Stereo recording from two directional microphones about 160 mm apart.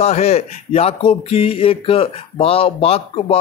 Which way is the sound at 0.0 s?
40° left (ahead or behind).